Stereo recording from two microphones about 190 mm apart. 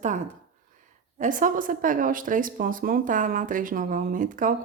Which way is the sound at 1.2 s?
45° right (ahead or behind).